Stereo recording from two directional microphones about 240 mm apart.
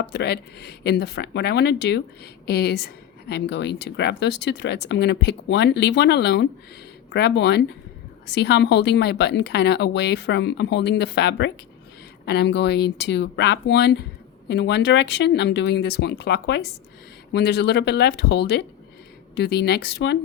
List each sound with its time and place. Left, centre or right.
0.0 s speech: left